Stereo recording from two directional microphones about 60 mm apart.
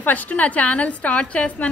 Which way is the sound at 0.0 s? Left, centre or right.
Left.